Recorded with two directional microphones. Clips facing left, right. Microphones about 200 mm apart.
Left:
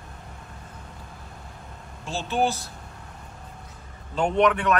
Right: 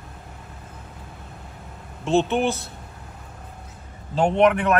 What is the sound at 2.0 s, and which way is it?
Speech, 60° right (ahead or behind).